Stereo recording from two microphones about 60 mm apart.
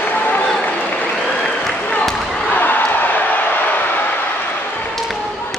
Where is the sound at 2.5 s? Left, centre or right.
Left.